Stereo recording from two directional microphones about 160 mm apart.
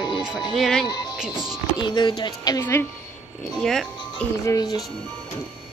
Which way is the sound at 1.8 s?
30° left (ahead or behind).